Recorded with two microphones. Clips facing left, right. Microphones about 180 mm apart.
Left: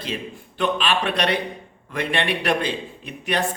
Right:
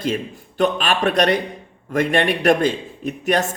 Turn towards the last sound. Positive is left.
turn(degrees=-45)  # may be behind; listen again after turning